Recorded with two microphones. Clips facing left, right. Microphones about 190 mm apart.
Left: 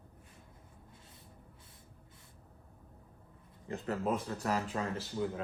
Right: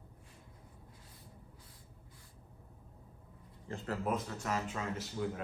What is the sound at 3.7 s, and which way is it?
Speech, 20° left (ahead or behind).